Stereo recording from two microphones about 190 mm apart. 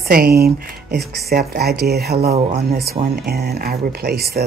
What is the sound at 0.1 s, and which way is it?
Speech, 55° right (ahead or behind).